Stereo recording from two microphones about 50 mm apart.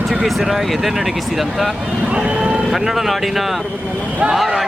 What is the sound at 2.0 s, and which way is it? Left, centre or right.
Speech, centre.